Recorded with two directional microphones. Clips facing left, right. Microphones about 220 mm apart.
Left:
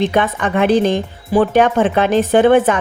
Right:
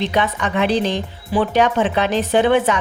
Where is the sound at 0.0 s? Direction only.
50° left (ahead or behind).